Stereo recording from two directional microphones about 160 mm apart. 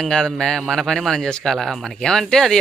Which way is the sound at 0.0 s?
5° left (ahead or behind).